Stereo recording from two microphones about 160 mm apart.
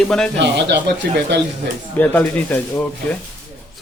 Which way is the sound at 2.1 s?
10° left (ahead or behind).